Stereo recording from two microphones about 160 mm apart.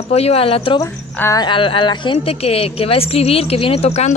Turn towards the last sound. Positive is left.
turn(degrees=40)  # may be behind; listen again after turning